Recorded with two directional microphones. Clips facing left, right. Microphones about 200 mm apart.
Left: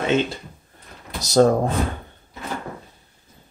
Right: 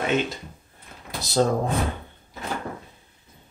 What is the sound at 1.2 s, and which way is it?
Speech, 45° left (ahead or behind).